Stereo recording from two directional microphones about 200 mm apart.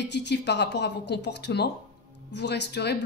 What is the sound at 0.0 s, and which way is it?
Speech, 60° left (ahead or behind).